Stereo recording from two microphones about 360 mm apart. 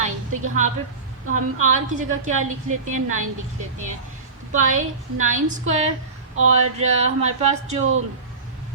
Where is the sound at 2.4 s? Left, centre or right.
Right.